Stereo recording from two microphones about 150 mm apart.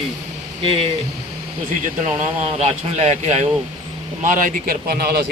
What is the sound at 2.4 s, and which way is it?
Speech, 45° right (ahead or behind).